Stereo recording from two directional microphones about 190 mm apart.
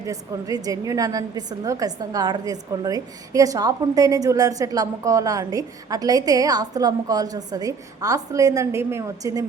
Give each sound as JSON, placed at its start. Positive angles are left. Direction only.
{"t": 0.0, "sound": "a woman's voice", "side_deg": -20}